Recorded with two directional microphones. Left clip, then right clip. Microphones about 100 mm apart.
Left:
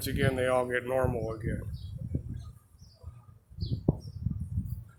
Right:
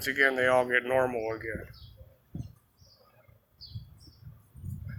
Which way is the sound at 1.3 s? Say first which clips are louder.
Right 3 dB; 20° right (ahead or behind).